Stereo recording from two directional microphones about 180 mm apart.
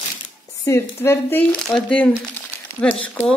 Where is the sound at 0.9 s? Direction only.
15° left (ahead or behind).